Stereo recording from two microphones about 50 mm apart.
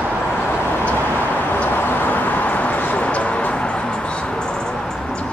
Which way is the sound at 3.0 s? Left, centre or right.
Left.